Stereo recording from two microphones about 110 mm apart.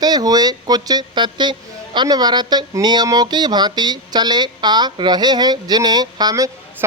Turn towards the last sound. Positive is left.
turn(degrees=-35)  # may be behind; listen again after turning